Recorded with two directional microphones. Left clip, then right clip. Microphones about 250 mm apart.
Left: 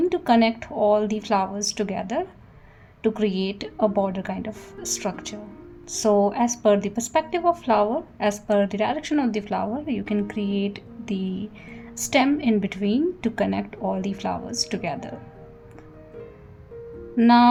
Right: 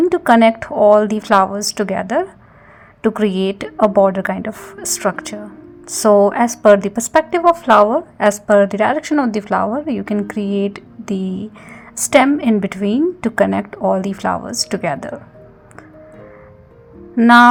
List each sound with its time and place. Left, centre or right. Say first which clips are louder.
0.0 s a woman's voice: right 9 dB; centre
3.2 s a woman's voice: right 8 dB; right
3.5 s a woman's voice: right 9 dB; right
17.2 s a woman's voice: right 8 dB; centre